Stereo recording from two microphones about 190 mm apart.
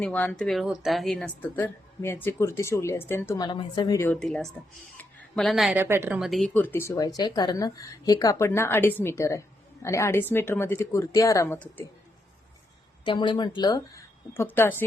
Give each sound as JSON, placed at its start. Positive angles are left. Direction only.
{"t": 0.0, "sound": "a woman's voice", "side_deg": 10}
{"t": 3.9, "sound": "a woman's voice", "side_deg": 15}
{"t": 4.2, "sound": "speech", "side_deg": 0}
{"t": 5.8, "sound": "a woman's voice", "side_deg": -10}
{"t": 6.1, "sound": "a woman's voice", "side_deg": 0}
{"t": 13.1, "sound": "speech", "side_deg": 25}